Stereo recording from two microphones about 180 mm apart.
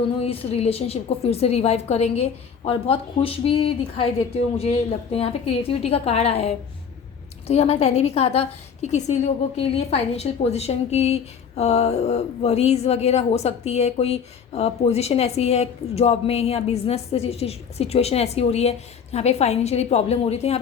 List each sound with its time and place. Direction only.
0.2 s a woman's voice: 35° left (ahead or behind)